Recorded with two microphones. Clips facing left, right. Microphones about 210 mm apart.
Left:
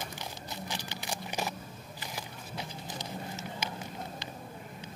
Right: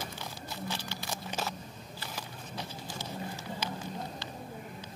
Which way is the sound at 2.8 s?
20° left (ahead or behind).